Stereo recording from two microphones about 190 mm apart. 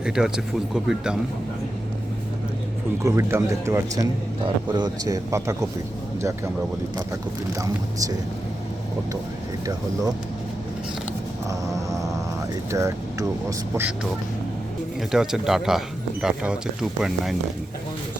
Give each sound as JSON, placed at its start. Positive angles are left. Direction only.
{"t": 0.0, "sound": "speech", "side_deg": -5}
{"t": 3.0, "sound": "a man's voice", "side_deg": -15}
{"t": 7.6, "sound": "a man's voice", "side_deg": -20}
{"t": 9.6, "sound": "speech", "side_deg": -20}
{"t": 11.4, "sound": "music", "side_deg": -15}
{"t": 12.7, "sound": "speech", "side_deg": -15}
{"t": 15.1, "sound": "speech", "side_deg": 0}